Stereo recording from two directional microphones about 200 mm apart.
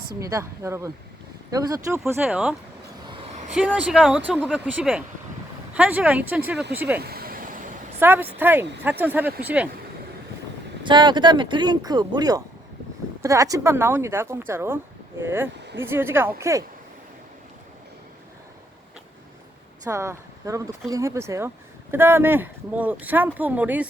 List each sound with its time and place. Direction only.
0.2 s speech: 15° right (ahead or behind)
7.0 s vehicle: 50° right (ahead or behind)
7.9 s speech: 10° right (ahead or behind)
10.8 s speech: 20° right (ahead or behind)
19.8 s speech: 15° right (ahead or behind)